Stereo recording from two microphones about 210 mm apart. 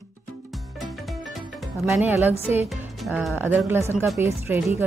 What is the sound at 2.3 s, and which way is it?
Speech, 30° left (ahead or behind).